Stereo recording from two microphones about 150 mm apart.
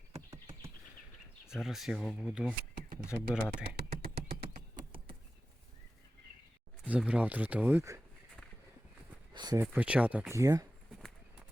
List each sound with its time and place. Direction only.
0.1 s a sound: 20° right (ahead or behind)
1.5 s speech: centre (ahead or behind)
3.8 s beatboxing: 90° right
6.8 s speech: 10° right (ahead or behind)
9.3 s a sound: 30° right (ahead or behind)
9.7 s speech: 10° right (ahead or behind)